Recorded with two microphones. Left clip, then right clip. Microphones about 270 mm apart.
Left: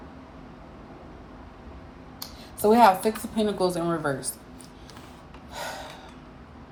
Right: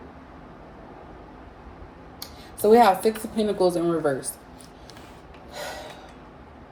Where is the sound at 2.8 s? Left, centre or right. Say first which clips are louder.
Left 2 dB; centre.